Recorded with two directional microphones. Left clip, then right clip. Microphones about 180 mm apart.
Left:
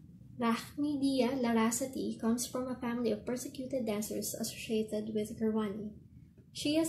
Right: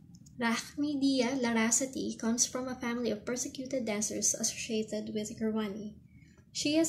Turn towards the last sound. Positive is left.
turn(degrees=-20)  # may be behind; listen again after turning